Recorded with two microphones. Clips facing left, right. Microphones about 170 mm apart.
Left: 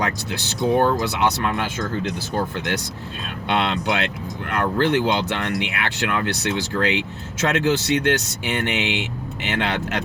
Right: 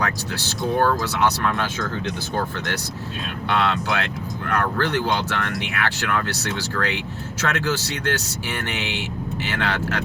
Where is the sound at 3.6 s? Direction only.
20° left (ahead or behind).